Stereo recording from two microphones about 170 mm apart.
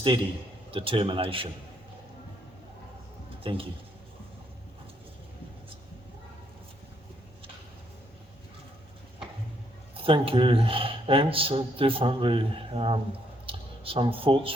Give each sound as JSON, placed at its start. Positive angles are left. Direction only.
{"t": 0.7, "sound": "speech", "side_deg": -30}
{"t": 3.4, "sound": "speech", "side_deg": -30}
{"t": 9.9, "sound": "speech", "side_deg": -35}